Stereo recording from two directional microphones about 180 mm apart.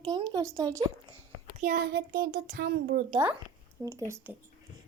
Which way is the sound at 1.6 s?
50° right (ahead or behind).